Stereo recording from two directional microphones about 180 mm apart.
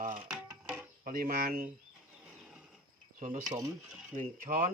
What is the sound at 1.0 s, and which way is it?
Speech, 55° right (ahead or behind).